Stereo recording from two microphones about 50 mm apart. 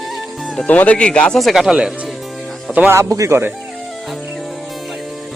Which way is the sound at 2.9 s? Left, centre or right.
Right.